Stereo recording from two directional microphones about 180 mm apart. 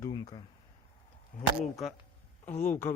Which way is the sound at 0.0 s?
30° left (ahead or behind).